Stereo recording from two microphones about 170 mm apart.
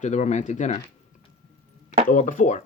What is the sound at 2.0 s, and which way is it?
Speech, 50° left (ahead or behind).